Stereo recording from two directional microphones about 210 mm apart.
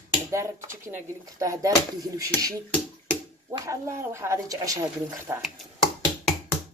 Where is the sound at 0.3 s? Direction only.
15° right (ahead or behind).